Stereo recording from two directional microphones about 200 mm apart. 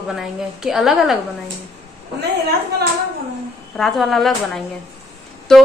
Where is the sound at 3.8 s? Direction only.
Centre (ahead or behind).